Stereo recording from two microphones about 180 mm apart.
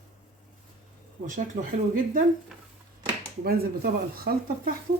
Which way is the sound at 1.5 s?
50° right (ahead or behind).